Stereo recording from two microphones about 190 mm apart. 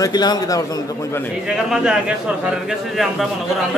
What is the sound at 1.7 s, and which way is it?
Speech, 5° right (ahead or behind).